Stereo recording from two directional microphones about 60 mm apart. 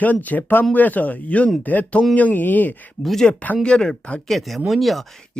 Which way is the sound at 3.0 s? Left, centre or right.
Centre.